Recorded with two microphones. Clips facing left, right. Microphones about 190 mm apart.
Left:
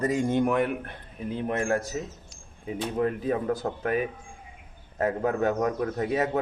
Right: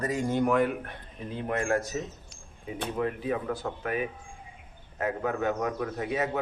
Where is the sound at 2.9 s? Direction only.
40° left (ahead or behind).